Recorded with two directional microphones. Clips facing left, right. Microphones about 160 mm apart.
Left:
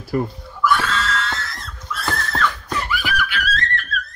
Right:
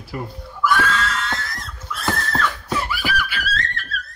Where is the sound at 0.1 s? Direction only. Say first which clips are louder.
Left 8 dB; 45° left (ahead or behind).